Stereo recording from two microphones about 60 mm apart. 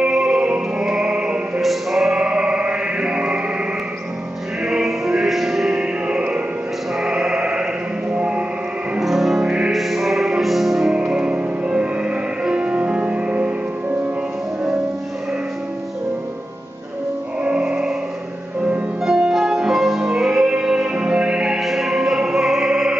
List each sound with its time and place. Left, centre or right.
0.0 s music: centre
1.6 s music: centre
2.1 s music: centre
4.6 s music: centre
9.0 s music: centre
11.0 s music: centre
17.4 s music: centre
19.0 s music: centre
21.5 s music: centre